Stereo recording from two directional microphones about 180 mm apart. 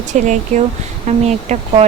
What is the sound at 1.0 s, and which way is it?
Speech, 35° right (ahead or behind).